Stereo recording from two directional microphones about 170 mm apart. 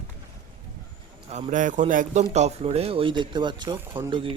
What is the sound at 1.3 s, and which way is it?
A man's voice, 45° right (ahead or behind).